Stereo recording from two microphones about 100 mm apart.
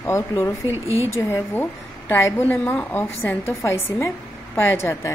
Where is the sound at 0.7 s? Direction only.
25° right (ahead or behind).